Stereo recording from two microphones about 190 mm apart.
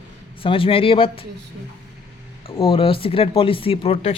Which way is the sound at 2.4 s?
30° left (ahead or behind).